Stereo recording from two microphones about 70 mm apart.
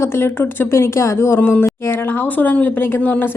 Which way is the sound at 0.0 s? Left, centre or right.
Left.